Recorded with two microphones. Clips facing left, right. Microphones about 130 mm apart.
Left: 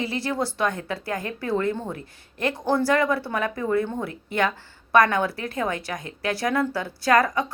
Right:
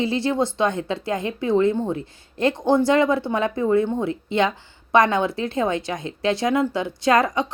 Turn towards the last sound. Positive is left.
turn(degrees=-20)  # may be behind; listen again after turning